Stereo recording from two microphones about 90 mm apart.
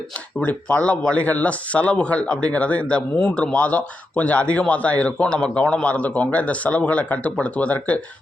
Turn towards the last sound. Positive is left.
turn(degrees=15)  # may be behind; listen again after turning